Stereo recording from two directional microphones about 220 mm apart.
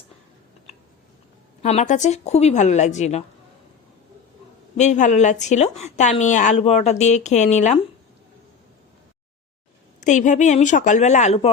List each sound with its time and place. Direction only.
0.7 s a sound: 30° left (ahead or behind)
1.6 s a woman's voice: 35° left (ahead or behind)
4.8 s a woman's voice: 35° left (ahead or behind)
10.0 s a woman's voice: 35° left (ahead or behind)